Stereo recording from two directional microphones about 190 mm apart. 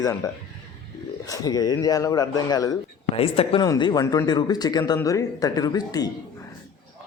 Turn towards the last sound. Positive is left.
turn(degrees=20)  # may be behind; listen again after turning